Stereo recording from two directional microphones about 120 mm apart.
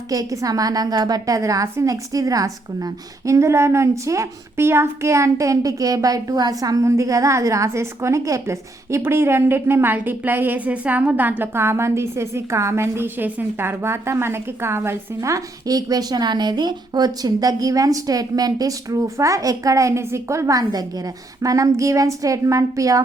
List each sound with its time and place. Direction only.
0.1 s a woman's voice: 30° right (ahead or behind)